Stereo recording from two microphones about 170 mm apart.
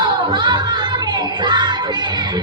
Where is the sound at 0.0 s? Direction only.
25° right (ahead or behind).